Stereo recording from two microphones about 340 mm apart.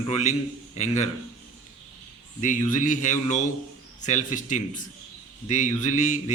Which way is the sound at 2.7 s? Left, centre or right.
Left.